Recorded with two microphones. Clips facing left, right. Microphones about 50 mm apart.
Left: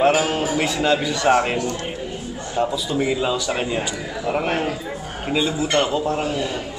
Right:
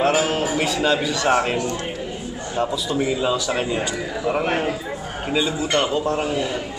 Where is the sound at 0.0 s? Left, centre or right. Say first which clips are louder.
Left 1 dB; centre.